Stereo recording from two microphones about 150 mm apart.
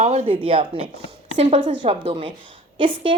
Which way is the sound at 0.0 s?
40° right (ahead or behind).